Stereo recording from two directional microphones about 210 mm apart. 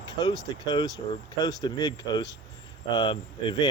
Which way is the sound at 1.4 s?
15° left (ahead or behind).